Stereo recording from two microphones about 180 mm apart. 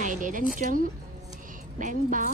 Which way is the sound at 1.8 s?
45° right (ahead or behind).